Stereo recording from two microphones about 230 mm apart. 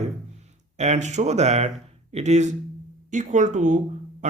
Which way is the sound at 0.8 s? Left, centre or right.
Right.